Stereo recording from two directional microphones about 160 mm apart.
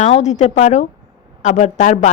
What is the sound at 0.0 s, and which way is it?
A woman's voice, 45° left (ahead or behind).